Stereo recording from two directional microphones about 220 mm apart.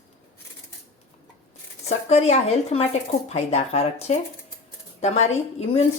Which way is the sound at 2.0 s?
30° left (ahead or behind).